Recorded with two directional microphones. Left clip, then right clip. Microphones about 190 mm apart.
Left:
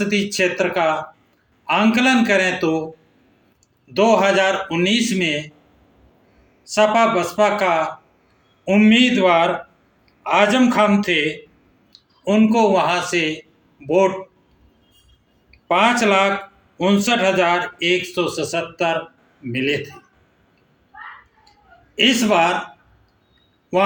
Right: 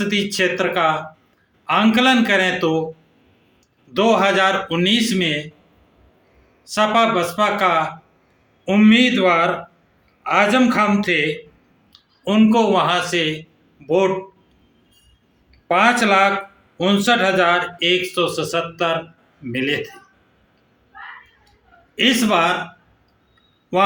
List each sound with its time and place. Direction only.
0.0 s speech: 15° right (ahead or behind)
3.9 s speech: 15° right (ahead or behind)
6.7 s a man's voice: 15° right (ahead or behind)
15.6 s speech: 10° right (ahead or behind)
21.9 s speech: 15° right (ahead or behind)